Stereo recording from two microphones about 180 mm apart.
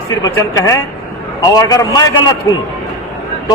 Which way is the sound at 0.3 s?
15° left (ahead or behind).